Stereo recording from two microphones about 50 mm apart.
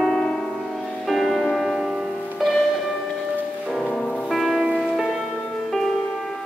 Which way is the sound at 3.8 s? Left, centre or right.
Centre.